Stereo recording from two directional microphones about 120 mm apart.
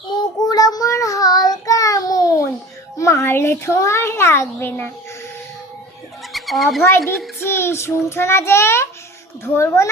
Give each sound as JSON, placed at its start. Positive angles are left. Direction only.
{"t": 0.2, "sound": "child singing", "side_deg": 30}
{"t": 3.0, "sound": "a child's voice", "side_deg": 25}
{"t": 6.3, "sound": "a child's voice", "side_deg": 0}
{"t": 7.3, "sound": "a child's voice", "side_deg": 20}